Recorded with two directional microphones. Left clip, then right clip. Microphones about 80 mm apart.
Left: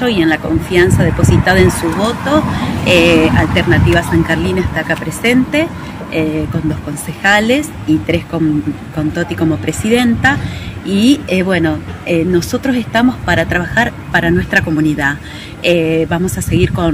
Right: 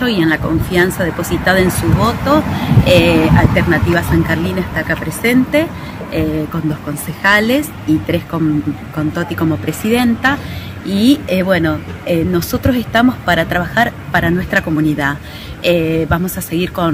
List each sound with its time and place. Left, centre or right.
0.0 s speech: right
4.1 s speech: right